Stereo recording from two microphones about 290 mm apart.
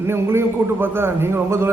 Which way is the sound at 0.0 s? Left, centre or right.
Centre.